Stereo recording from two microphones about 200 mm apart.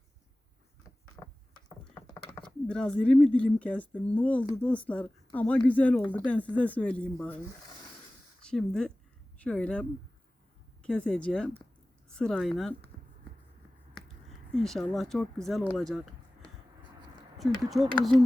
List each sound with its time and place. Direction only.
1.2 s a sound: 15° left (ahead or behind)
1.8 s speech: 15° left (ahead or behind)
8.4 s speech: 5° left (ahead or behind)
10.8 s speech: 5° left (ahead or behind)
14.3 s speech: centre (ahead or behind)
17.3 s speech: centre (ahead or behind)